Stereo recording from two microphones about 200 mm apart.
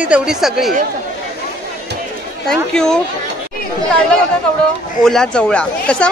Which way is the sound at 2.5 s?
5° left (ahead or behind).